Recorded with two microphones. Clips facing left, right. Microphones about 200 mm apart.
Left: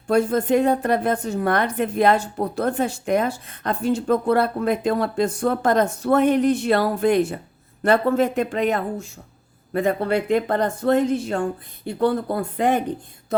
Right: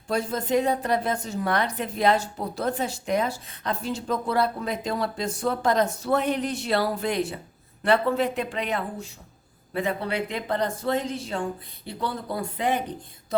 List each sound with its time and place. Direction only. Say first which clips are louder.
0.1 s a woman's voice: left 6 dB; 55° left (ahead or behind)